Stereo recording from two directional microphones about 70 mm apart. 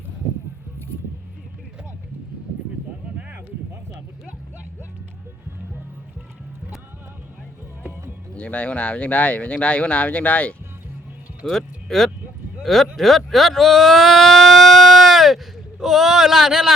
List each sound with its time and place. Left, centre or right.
8.4 s speech: left
11.4 s speech: centre